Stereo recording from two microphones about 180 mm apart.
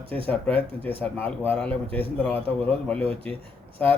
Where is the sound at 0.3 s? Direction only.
10° left (ahead or behind).